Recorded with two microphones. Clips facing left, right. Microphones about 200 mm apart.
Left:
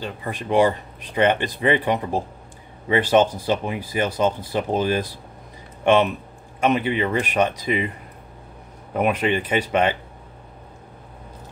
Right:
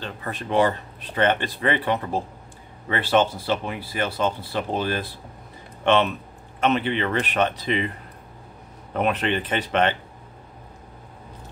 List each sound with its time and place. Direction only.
0.0 s speech: 10° left (ahead or behind)
6.6 s speech: 10° left (ahead or behind)
8.9 s speech: 10° left (ahead or behind)